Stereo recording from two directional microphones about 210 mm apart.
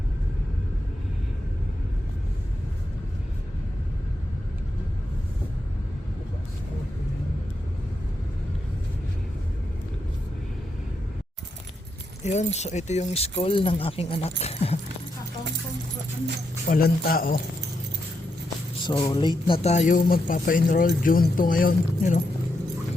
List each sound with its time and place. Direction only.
12.2 s speech: 35° left (ahead or behind)
16.6 s a man's voice: 45° left (ahead or behind)
18.8 s speech: 20° left (ahead or behind); by 22.2 s 40° left (ahead or behind)